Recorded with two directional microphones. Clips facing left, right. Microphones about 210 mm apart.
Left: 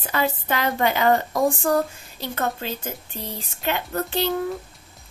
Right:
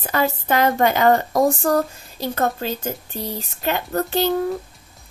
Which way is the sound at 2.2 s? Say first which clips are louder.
Right 5 dB; 40° right (ahead or behind).